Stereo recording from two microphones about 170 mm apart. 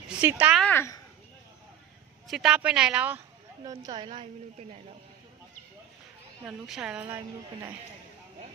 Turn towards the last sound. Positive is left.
turn(degrees=-10)  # may be behind; listen again after turning